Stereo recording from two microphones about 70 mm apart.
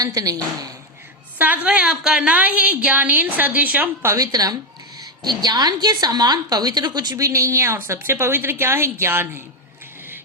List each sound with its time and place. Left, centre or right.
0.0 s a woman's voice: right
1.4 s a woman's voice: centre
4.0 s a woman's voice: right
4.3 s a woman's voice: right
4.9 s a woman's voice: right
7.2 s a woman's voice: right